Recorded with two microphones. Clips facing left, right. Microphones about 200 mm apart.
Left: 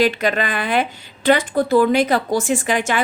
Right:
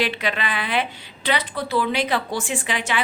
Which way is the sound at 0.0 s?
45° left (ahead or behind).